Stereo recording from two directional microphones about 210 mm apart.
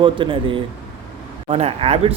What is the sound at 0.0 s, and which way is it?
Speech, 25° right (ahead or behind).